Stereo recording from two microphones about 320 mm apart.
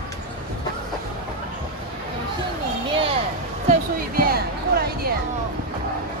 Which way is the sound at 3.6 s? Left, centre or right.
Right.